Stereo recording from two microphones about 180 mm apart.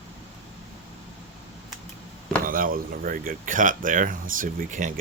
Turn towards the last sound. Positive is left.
turn(degrees=-45)  # may be behind; listen again after turning